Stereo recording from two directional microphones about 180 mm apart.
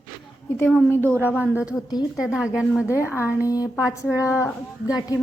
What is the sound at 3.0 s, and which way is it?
A woman's voice, 15° left (ahead or behind).